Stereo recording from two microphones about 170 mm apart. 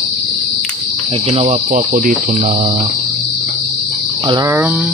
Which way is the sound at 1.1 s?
35° right (ahead or behind).